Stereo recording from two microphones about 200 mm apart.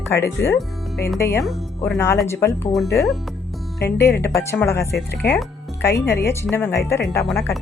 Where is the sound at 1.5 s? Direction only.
Centre (ahead or behind).